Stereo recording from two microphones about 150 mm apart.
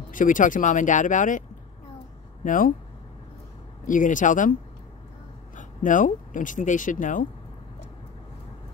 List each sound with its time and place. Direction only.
0.1 s speech: 65° left (ahead or behind)
2.4 s speech: 60° left (ahead or behind)
3.8 s speech: 60° left (ahead or behind)
5.6 s speech: 60° left (ahead or behind)